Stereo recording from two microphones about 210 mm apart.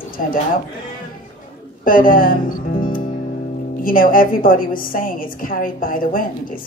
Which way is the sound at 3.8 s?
40° left (ahead or behind).